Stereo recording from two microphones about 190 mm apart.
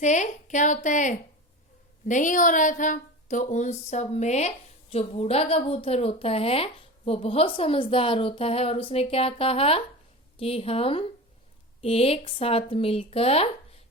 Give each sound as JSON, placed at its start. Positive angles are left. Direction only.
{"t": 0.0, "sound": "a woman's voice", "side_deg": 40}